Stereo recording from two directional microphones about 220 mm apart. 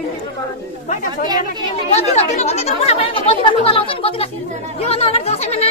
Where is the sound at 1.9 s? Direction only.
30° left (ahead or behind).